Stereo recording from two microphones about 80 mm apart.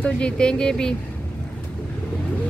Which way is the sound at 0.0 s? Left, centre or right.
Centre.